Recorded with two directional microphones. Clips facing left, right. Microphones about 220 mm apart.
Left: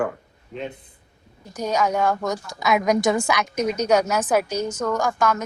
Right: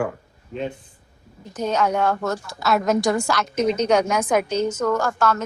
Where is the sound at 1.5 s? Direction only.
10° left (ahead or behind).